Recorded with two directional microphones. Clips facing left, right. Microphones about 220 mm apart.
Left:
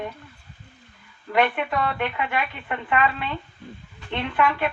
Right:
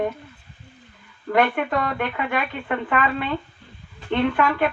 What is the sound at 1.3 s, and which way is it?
Speech, 50° right (ahead or behind).